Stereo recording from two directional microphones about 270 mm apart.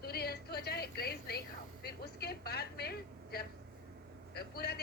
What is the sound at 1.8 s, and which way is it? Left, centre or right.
A woman's voice, left.